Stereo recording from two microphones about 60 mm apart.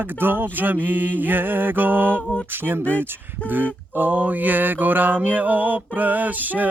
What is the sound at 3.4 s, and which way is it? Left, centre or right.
Mantra, right.